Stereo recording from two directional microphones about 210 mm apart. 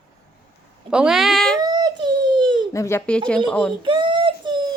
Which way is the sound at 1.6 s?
20° right (ahead or behind).